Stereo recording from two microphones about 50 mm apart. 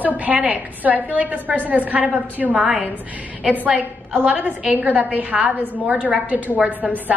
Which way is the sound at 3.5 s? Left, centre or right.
Right.